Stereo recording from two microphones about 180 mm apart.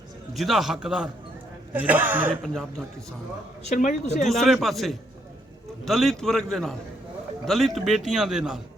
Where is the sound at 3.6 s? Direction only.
45° left (ahead or behind).